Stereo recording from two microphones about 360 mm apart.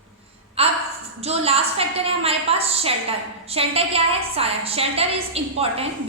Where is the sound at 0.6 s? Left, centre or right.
Centre.